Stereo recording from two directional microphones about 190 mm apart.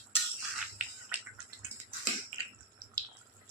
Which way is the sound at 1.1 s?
10° right (ahead or behind).